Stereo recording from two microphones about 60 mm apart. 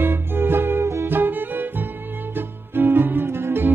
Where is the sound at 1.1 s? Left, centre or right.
Right.